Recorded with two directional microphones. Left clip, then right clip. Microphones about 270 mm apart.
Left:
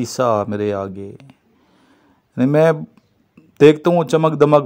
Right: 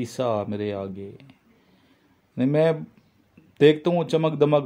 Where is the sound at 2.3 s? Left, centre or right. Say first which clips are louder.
Left 7 dB; left.